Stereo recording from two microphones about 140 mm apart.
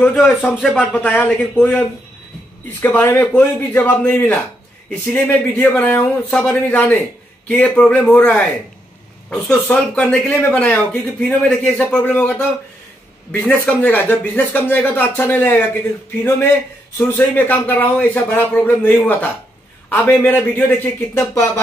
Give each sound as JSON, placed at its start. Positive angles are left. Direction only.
{"t": 0.0, "sound": "speech", "side_deg": 10}
{"t": 17.1, "sound": "speech", "side_deg": 15}